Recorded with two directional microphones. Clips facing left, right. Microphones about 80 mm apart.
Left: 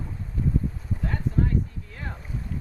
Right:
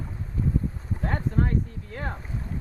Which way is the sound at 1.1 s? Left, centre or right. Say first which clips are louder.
Right 1 dB; right.